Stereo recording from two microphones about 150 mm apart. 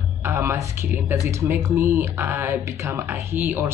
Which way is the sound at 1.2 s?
15° right (ahead or behind).